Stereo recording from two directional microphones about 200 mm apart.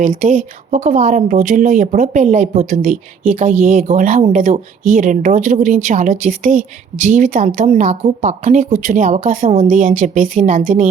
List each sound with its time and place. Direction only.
0.0 s speech: 40° right (ahead or behind)